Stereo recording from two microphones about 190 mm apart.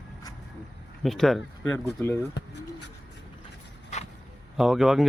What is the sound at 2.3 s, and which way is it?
Pigeon, 65° left (ahead or behind).